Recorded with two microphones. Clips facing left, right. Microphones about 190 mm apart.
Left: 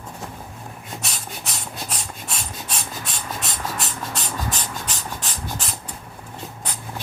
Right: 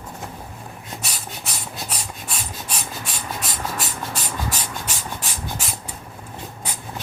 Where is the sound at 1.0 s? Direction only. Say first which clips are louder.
Even; 5° right (ahead or behind).